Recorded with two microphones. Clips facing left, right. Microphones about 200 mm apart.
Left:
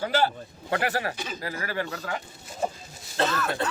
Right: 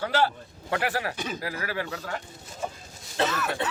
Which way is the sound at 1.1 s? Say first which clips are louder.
Right 3 dB; 55° right (ahead or behind).